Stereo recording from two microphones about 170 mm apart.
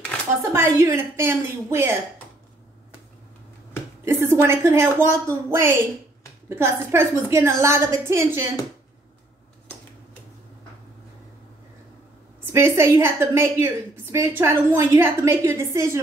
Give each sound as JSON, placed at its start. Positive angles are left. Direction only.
{"t": 0.5, "sound": "a woman's voice", "side_deg": -20}
{"t": 4.0, "sound": "a woman's voice", "side_deg": -15}
{"t": 12.5, "sound": "a woman's voice", "side_deg": -15}